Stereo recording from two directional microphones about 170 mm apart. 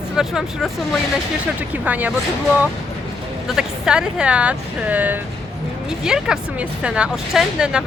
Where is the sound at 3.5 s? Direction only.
5° right (ahead or behind).